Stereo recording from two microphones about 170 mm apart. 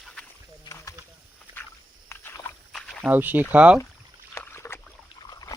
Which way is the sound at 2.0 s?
15° left (ahead or behind).